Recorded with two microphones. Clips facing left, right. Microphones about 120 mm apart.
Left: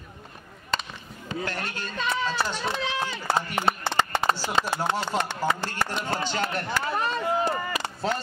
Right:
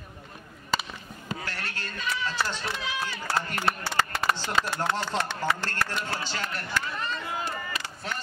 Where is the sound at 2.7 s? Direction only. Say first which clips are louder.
Left 4 dB; 20° left (ahead or behind).